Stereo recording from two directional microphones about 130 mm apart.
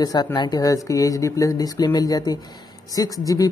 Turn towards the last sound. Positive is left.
turn(degrees=25)  # may be behind; listen again after turning